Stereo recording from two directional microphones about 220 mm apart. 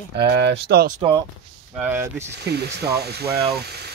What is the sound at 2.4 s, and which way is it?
Speech, 50° right (ahead or behind).